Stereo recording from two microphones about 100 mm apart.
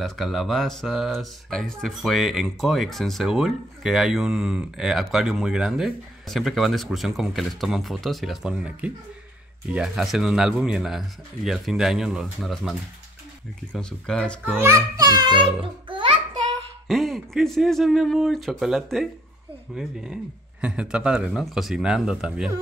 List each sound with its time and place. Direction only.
0.0 s speech: centre (ahead or behind)
15.0 s a child's voice: 45° right (ahead or behind)
16.8 s speech: centre (ahead or behind)